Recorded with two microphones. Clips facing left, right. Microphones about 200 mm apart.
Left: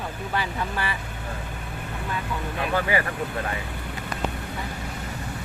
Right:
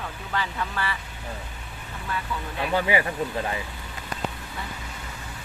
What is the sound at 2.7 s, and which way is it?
Speech, 15° right (ahead or behind).